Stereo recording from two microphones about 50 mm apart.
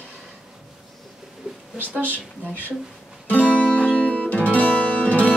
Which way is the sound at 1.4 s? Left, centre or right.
Centre.